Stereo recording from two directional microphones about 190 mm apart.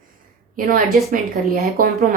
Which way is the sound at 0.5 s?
45° right (ahead or behind).